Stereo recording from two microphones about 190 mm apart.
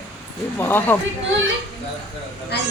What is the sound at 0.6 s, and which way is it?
Speech, 10° left (ahead or behind).